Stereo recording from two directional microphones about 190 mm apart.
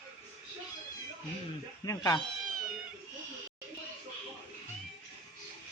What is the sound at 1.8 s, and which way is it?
Speech, 20° left (ahead or behind).